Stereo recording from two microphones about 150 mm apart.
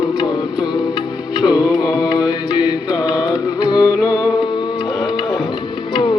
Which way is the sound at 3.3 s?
25° left (ahead or behind).